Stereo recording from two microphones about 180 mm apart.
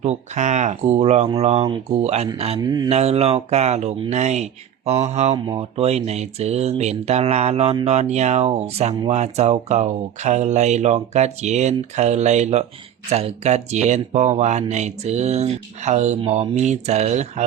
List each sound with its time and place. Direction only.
0.0 s speech: 40° right (ahead or behind)
2.6 s speech: 20° right (ahead or behind)
2.9 s speech: 35° right (ahead or behind)